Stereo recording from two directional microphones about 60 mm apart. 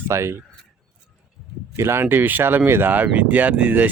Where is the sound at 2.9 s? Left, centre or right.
Right.